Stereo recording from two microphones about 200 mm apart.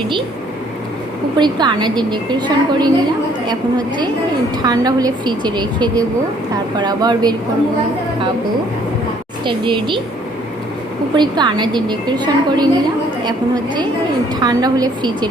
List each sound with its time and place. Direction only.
1.4 s a woman's voice: 20° right (ahead or behind)
9.4 s a woman's voice: 25° right (ahead or behind)
11.1 s a woman's voice: 20° right (ahead or behind)
14.3 s a woman's voice: 20° right (ahead or behind)